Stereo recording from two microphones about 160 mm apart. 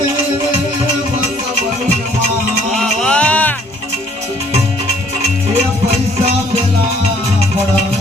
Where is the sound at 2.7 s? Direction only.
5° left (ahead or behind).